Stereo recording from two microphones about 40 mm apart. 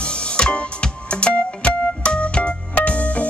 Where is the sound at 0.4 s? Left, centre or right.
Left.